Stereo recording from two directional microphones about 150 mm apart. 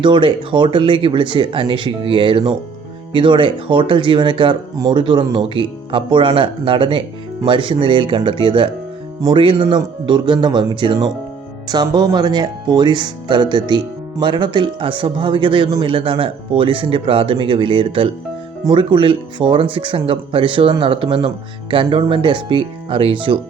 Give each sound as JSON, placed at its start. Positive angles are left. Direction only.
{"t": 0.0, "sound": "speech", "side_deg": -35}